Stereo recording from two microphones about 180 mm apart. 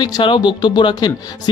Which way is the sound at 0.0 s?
25° left (ahead or behind).